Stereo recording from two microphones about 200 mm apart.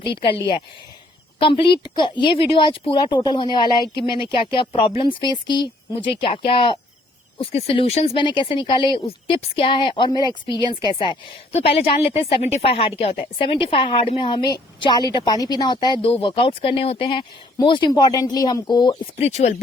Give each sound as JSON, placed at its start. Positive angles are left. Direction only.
{"t": 0.0, "sound": "a woman's voice", "side_deg": 25}
{"t": 1.4, "sound": "a woman's voice", "side_deg": 25}